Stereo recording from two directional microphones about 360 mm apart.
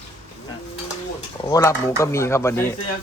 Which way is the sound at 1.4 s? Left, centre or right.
Centre.